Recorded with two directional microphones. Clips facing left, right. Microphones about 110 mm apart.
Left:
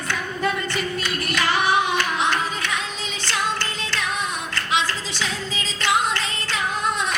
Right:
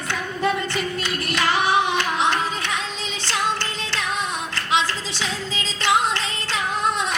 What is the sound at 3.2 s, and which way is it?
Music, 25° right (ahead or behind).